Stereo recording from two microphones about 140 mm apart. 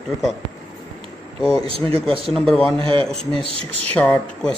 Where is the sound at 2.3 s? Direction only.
5° left (ahead or behind).